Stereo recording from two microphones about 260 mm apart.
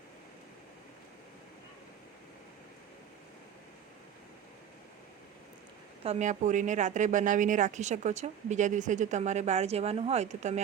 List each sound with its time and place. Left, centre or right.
6.0 s a woman's voice: right